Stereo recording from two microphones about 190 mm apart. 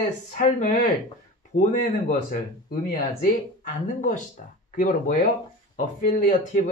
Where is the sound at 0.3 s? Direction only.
40° left (ahead or behind).